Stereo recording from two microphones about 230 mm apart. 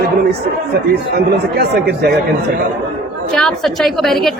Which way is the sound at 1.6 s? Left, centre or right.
Right.